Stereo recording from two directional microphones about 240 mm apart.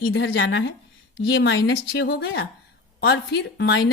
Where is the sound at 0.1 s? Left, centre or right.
Left.